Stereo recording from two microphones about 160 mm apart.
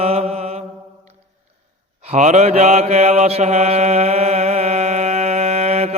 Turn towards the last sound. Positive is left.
turn(degrees=-45)  # may be behind; listen again after turning